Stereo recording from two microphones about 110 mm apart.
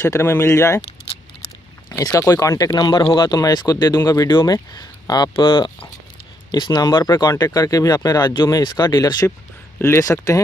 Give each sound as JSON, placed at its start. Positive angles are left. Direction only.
{"t": 0.0, "sound": "speech", "side_deg": 25}
{"t": 2.1, "sound": "speech", "side_deg": 30}
{"t": 5.3, "sound": "speech", "side_deg": 45}
{"t": 9.8, "sound": "speech", "side_deg": 25}